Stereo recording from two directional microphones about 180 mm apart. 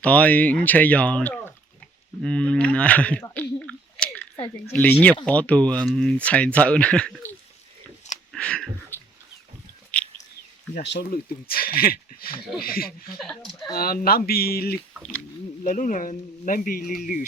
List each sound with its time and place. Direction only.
0.0 s speech: 5° left (ahead or behind)
3.3 s chewing: 5° left (ahead or behind)
4.7 s speech: 10° left (ahead or behind)
8.3 s a sound: 5° left (ahead or behind)
10.8 s speech: 65° left (ahead or behind)
13.1 s speech: centre (ahead or behind)
13.7 s speech: 55° left (ahead or behind)
14.9 s speech: 5° left (ahead or behind)
15.6 s speech: 45° left (ahead or behind)